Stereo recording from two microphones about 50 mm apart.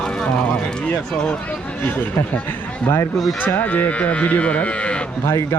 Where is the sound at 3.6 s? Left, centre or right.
Left.